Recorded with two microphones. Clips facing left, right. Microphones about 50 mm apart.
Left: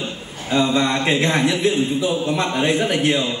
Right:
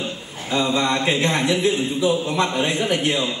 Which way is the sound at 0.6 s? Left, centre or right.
Left.